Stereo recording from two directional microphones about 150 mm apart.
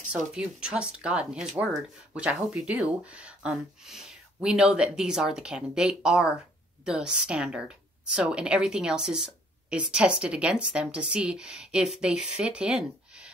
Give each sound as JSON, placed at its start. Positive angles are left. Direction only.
{"t": 0.3, "sound": "speech", "side_deg": -5}